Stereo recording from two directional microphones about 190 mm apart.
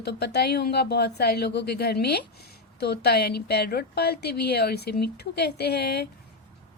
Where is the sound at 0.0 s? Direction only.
60° left (ahead or behind).